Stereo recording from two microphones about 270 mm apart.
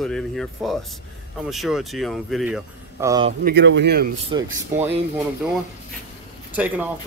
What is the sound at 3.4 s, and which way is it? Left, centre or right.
Speech, right.